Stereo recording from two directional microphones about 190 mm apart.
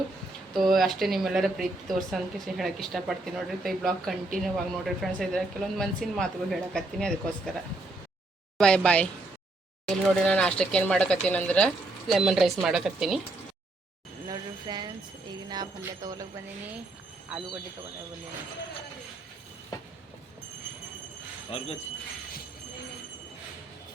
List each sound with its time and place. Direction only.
0.5 s speech: centre (ahead or behind)
8.5 s speech: 5° left (ahead or behind)
14.3 s speech: 20° right (ahead or behind)
15.4 s jingle bell: 20° right (ahead or behind)
15.8 s speech: 20° right (ahead or behind)
21.5 s speech: 30° left (ahead or behind)